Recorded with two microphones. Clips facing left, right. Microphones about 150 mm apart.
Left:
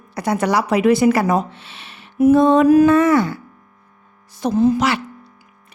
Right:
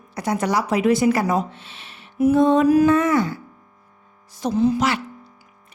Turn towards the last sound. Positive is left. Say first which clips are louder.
# left 3 dB
turn(degrees=50)  # may be behind; listen again after turning